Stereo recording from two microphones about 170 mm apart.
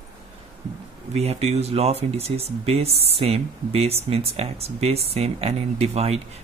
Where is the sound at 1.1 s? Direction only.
40° right (ahead or behind).